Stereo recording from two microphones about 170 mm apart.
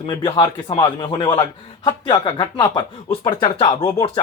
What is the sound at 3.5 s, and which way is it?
Speech, 30° left (ahead or behind).